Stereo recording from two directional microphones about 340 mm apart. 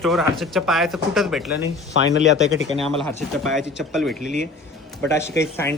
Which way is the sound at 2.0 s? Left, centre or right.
Left.